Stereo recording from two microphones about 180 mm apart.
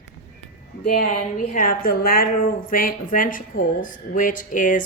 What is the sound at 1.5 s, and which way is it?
Speech, 50° left (ahead or behind).